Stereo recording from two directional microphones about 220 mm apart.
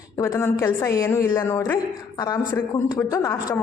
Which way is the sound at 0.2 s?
10° left (ahead or behind).